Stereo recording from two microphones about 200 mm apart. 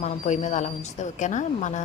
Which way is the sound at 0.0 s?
35° left (ahead or behind).